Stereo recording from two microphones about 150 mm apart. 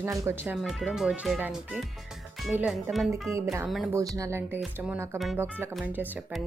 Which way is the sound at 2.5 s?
10° right (ahead or behind).